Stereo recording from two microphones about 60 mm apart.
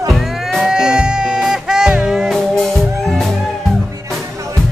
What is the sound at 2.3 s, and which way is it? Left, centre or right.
Music, centre.